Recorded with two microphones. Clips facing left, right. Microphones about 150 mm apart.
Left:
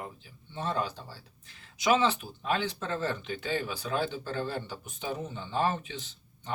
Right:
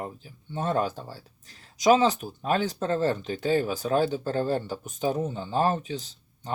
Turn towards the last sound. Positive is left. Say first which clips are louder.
# right 4 dB
turn(degrees=-40)  # may be behind; listen again after turning